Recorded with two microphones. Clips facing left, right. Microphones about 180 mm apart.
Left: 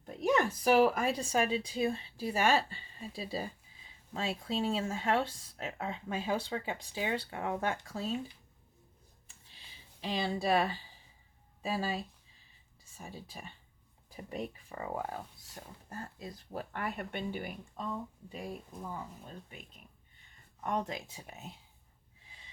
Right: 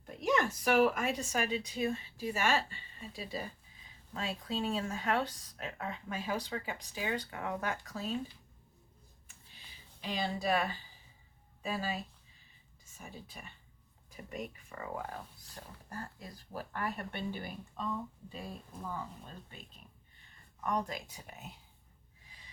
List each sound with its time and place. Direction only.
0.2 s a woman's voice: 35° left (ahead or behind)
10.0 s a woman's voice: 35° left (ahead or behind)
13.0 s a woman's voice: 30° left (ahead or behind); by 18.9 s 15° left (ahead or behind)
20.7 s speech: 25° left (ahead or behind)